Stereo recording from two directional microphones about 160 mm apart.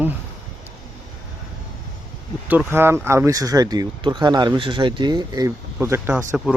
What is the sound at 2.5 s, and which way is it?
Speech, 10° right (ahead or behind).